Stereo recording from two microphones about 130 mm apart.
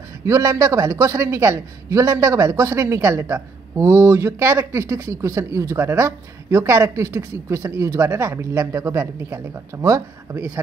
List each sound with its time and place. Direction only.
0.2 s a man's voice: 25° right (ahead or behind)